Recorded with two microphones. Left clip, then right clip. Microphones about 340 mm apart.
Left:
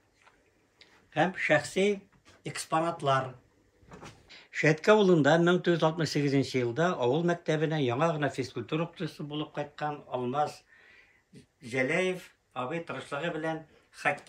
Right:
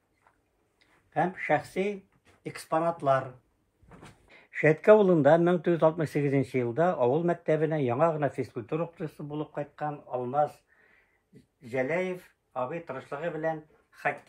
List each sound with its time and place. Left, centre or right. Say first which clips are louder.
0.7 s speech: even; centre
4.3 s speech: right 2 dB; centre
11.6 s speech: left 1 dB; centre